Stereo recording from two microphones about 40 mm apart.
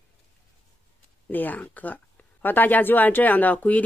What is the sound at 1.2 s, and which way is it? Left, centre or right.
Speech, left.